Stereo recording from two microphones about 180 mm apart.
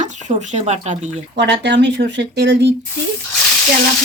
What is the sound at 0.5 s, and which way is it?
Speech, 40° right (ahead or behind).